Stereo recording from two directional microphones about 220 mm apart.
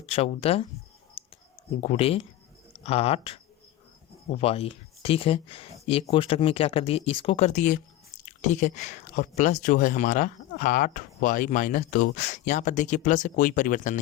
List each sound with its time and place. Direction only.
0.0 s speech: 25° left (ahead or behind)
1.2 s a sound: 25° left (ahead or behind)
1.8 s speech: 25° left (ahead or behind)